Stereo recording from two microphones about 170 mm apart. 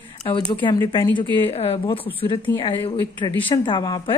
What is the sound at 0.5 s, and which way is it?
A woman's voice, 25° left (ahead or behind).